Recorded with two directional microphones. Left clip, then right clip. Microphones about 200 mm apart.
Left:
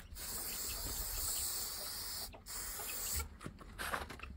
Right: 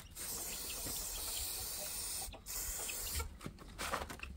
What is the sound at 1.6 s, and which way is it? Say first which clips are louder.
Hiss: left 1 dB; centre (ahead or behind).